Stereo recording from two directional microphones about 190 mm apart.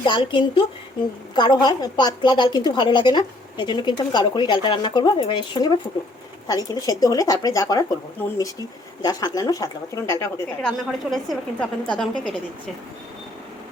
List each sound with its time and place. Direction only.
0.0 s a woman's voice: 25° left (ahead or behind)
9.0 s speech: 20° left (ahead or behind)
10.6 s a woman's voice: centre (ahead or behind)